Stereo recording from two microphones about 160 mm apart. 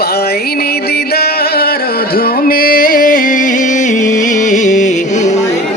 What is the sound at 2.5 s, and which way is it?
Music, 65° left (ahead or behind).